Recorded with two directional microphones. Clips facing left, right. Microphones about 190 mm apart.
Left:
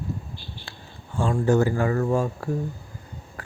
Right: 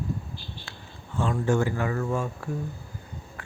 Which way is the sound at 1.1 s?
30° left (ahead or behind).